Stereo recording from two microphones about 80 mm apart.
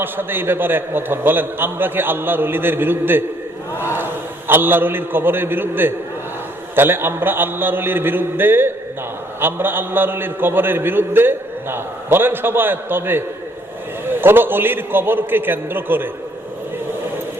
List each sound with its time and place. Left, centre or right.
0.0 s a man's voice: right